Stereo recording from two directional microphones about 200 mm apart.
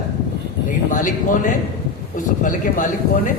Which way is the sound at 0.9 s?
40° left (ahead or behind).